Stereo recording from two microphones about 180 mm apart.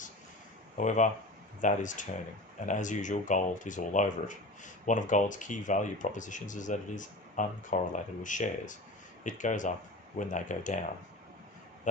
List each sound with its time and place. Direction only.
0.8 s speech: 45° left (ahead or behind)